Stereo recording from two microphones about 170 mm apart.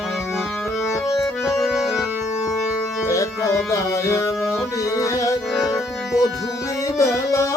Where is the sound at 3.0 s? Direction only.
20° left (ahead or behind).